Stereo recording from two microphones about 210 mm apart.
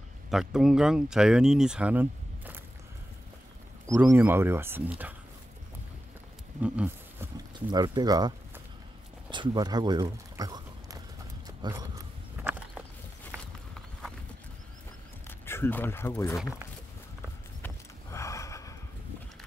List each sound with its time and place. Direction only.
0.3 s speech: centre (ahead or behind)
3.8 s speech: 10° right (ahead or behind)
6.6 s a sound: 5° right (ahead or behind)
7.3 s speech: 20° right (ahead or behind)
11.4 s a sound: 20° right (ahead or behind)
13.3 s horse: 10° right (ahead or behind)
15.2 s speech: 10° left (ahead or behind)
17.6 s horse: 10° left (ahead or behind)